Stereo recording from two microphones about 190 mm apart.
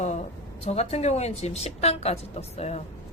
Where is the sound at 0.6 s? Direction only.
35° left (ahead or behind).